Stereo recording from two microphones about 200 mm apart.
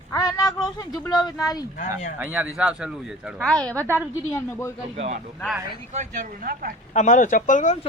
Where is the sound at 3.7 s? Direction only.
10° right (ahead or behind).